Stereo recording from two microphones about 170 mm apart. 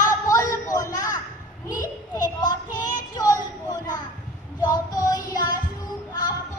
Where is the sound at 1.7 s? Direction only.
25° left (ahead or behind).